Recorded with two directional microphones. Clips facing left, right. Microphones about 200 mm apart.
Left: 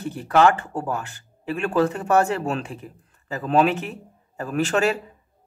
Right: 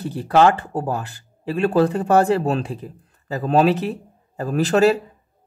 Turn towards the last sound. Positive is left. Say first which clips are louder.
# right 5 dB
turn(degrees=-35)  # may be behind; listen again after turning